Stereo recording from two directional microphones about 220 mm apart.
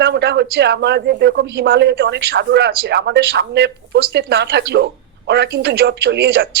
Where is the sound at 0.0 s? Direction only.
50° right (ahead or behind).